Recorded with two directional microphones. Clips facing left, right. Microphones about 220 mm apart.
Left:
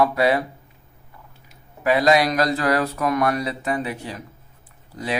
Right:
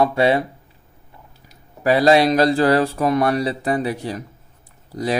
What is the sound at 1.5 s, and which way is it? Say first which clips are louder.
Speech: right 3 dB; 35° right (ahead or behind).